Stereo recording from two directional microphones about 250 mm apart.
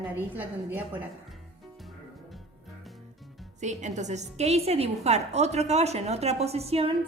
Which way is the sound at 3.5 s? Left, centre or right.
Right.